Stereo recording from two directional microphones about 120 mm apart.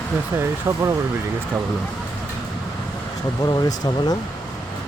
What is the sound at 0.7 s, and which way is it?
Speech, 20° right (ahead or behind).